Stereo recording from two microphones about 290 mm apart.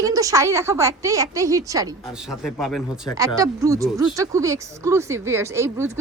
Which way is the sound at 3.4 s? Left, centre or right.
Centre.